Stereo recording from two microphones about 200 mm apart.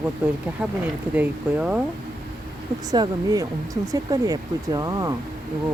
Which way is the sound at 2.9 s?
20° right (ahead or behind).